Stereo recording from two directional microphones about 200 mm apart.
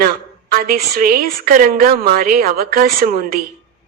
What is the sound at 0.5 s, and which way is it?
A woman's voice, 50° right (ahead or behind).